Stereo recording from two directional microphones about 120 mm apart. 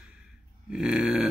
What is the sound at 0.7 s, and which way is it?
Burping, 5° right (ahead or behind).